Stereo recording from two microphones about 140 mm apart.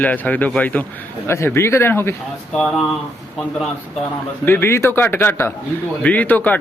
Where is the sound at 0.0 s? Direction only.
10° left (ahead or behind).